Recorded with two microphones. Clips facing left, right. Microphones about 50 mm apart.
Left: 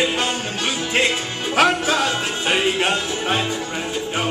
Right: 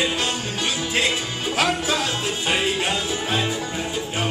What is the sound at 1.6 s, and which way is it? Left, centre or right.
Music, left.